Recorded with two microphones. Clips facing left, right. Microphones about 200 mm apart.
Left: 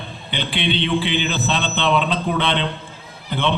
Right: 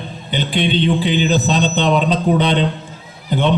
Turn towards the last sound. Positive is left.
turn(degrees=-40)  # may be behind; listen again after turning